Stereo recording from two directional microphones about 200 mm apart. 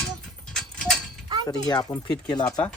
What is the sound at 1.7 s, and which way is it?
Speech, 20° left (ahead or behind).